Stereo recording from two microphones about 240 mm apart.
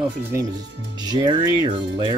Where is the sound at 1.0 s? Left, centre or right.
Centre.